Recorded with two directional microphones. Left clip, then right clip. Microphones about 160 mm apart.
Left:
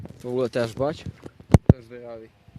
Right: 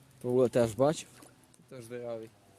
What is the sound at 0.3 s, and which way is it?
Speech, 15° right (ahead or behind).